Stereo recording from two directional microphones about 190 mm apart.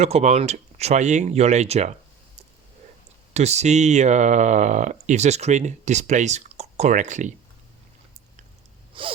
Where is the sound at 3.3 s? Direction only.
35° right (ahead or behind).